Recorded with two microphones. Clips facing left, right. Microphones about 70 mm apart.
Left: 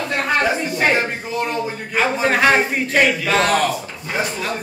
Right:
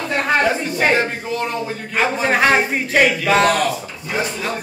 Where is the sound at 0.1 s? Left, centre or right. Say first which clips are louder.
Right 2 dB; centre.